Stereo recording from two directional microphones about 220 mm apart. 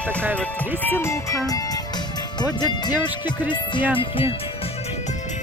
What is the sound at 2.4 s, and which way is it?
Speech, 20° left (ahead or behind).